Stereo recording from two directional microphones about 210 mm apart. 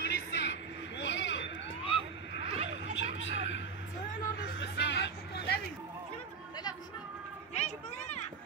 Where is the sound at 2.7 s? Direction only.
60° left (ahead or behind).